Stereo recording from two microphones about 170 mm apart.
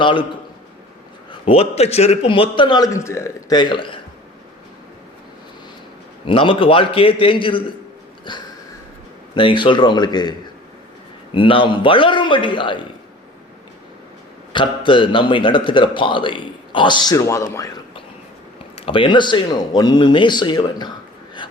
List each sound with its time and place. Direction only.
0.0 s a man's voice: 30° left (ahead or behind)
1.3 s a man's voice: 35° left (ahead or behind)
6.2 s a man's voice: 30° left (ahead or behind)
11.3 s a man's voice: 30° left (ahead or behind)
14.5 s a man's voice: 30° left (ahead or behind)
18.8 s a man's voice: 30° left (ahead or behind)